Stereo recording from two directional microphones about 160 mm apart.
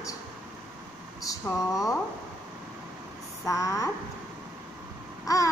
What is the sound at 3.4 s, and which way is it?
Speech, 20° left (ahead or behind).